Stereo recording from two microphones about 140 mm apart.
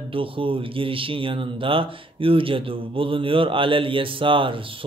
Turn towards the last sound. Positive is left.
turn(degrees=-40)  # may be behind; listen again after turning